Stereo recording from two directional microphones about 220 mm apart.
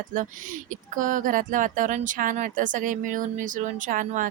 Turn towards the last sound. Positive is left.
turn(degrees=-35)  # may be behind; listen again after turning